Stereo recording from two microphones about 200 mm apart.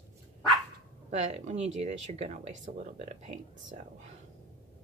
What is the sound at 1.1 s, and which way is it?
A woman's voice, 35° right (ahead or behind).